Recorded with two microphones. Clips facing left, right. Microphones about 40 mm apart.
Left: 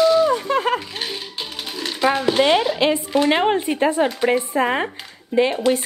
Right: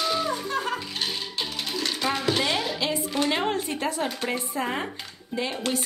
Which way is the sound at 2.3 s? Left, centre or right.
Left.